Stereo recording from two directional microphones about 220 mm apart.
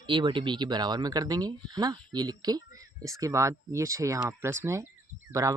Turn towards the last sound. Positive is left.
turn(degrees=-15)  # may be behind; listen again after turning